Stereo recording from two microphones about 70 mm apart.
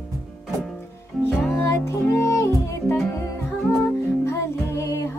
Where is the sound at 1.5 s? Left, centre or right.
Left.